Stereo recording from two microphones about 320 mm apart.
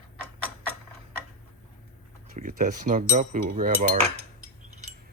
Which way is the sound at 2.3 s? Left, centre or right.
Right.